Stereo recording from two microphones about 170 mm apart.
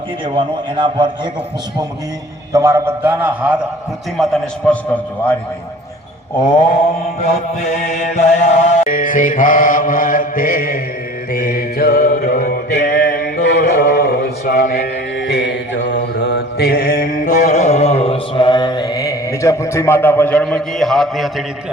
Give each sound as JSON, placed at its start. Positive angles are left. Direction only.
{"t": 0.3, "sound": "a man's voice", "side_deg": -30}
{"t": 2.5, "sound": "a man's voice", "side_deg": -20}
{"t": 4.2, "sound": "a man's voice", "side_deg": 0}
{"t": 7.8, "sound": "mantra", "side_deg": 45}
{"t": 11.3, "sound": "music", "side_deg": 60}